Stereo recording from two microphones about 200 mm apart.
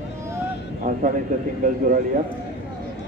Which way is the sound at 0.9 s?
40° right (ahead or behind).